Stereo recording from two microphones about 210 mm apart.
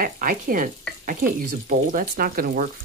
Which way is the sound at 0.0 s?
40° right (ahead or behind).